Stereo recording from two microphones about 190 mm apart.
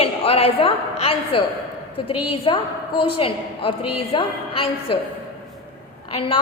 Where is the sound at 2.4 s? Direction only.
30° left (ahead or behind).